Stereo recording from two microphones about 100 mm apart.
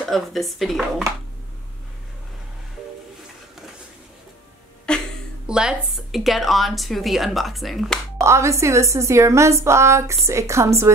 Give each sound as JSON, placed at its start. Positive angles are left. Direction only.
{"t": 0.1, "sound": "a woman's voice", "side_deg": 0}
{"t": 4.9, "sound": "a sound", "side_deg": 10}
{"t": 5.5, "sound": "a woman's voice", "side_deg": -10}
{"t": 8.2, "sound": "a woman's voice", "side_deg": -30}